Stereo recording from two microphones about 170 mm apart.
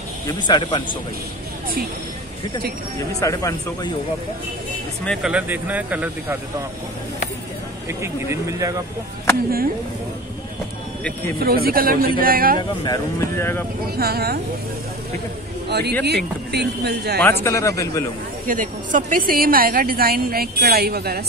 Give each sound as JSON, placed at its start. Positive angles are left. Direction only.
{"t": 0.3, "sound": "speech", "side_deg": 25}
{"t": 3.2, "sound": "speech", "side_deg": 20}
{"t": 5.0, "sound": "speech", "side_deg": 0}
{"t": 8.0, "sound": "speech", "side_deg": -15}
{"t": 11.3, "sound": "a woman's voice", "side_deg": -60}
{"t": 12.5, "sound": "speech", "side_deg": 25}
{"t": 13.9, "sound": "a woman's voice", "side_deg": -65}
{"t": 15.7, "sound": "speech", "side_deg": -75}
{"t": 17.2, "sound": "speech", "side_deg": 15}
{"t": 18.5, "sound": "a woman's voice", "side_deg": -50}